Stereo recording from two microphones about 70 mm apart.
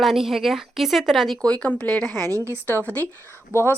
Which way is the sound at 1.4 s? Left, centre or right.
Centre.